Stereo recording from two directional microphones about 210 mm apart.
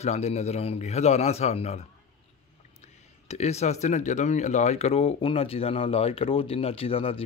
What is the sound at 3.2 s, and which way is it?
A man's voice, 30° left (ahead or behind).